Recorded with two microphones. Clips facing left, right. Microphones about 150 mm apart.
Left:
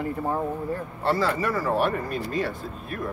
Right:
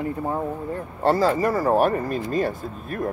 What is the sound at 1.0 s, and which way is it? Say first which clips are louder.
Speech: right 5 dB; 45° right (ahead or behind).